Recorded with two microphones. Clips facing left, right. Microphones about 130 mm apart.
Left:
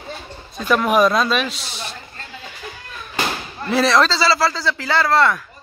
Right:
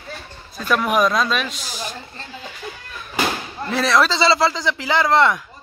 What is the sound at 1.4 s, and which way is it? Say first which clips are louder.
Speech: left 2 dB; 30° left (ahead or behind).